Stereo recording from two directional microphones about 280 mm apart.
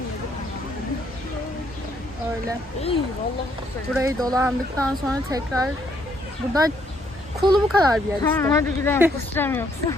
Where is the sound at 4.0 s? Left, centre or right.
Centre.